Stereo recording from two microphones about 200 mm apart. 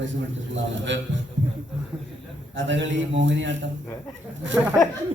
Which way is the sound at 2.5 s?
65° right (ahead or behind).